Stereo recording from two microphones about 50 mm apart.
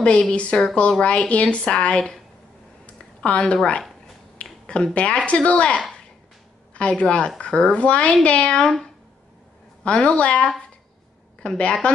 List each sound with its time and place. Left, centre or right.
0.0 s speech: left
3.2 s a woman's voice: left
7.0 s speech: left
9.8 s speech: left